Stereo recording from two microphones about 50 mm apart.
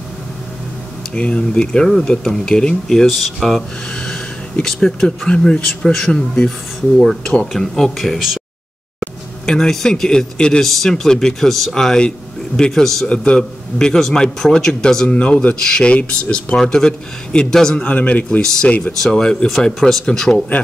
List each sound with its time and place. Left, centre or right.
1.1 s a man's voice: left
3.1 s speech: centre
3.9 s a sound: centre
4.8 s a man's voice: centre
7.0 s a man's voice: centre
9.5 s a man's voice: centre
10.6 s a man's voice: centre
13.0 s a man's voice: left
15.0 s a man's voice: left
17.8 s a man's voice: left
18.9 s a man's voice: centre